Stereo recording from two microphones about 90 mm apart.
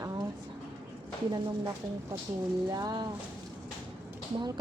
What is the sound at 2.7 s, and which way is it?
Speech, 50° right (ahead or behind).